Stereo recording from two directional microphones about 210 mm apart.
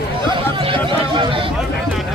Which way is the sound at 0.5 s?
25° right (ahead or behind).